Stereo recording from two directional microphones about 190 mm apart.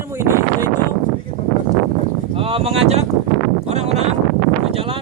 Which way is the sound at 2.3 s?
30° right (ahead or behind).